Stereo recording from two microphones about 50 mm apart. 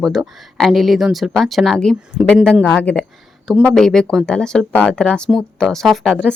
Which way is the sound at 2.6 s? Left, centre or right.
Left.